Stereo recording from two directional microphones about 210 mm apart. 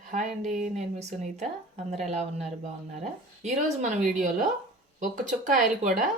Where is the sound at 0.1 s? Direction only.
35° right (ahead or behind).